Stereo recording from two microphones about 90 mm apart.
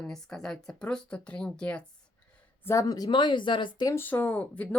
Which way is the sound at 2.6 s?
40° left (ahead or behind).